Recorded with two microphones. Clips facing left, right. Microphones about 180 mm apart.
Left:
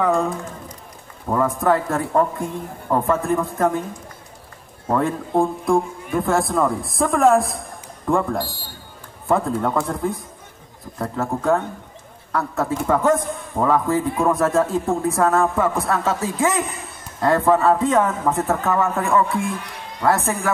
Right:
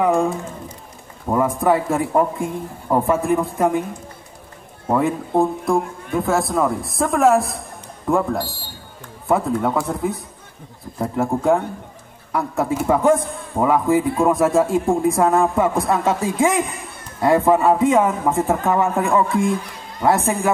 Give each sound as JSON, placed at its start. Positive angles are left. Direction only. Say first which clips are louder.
{"t": 0.0, "sound": "a man's voice", "louder": "right 2 dB", "side_deg": -10}
{"t": 1.3, "sound": "a man's voice", "louder": "right 1 dB", "side_deg": -15}
{"t": 4.8, "sound": "a man's voice", "louder": "right 2 dB", "side_deg": -10}